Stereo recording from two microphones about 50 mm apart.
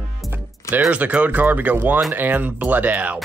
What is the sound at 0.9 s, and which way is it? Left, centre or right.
Speech, right.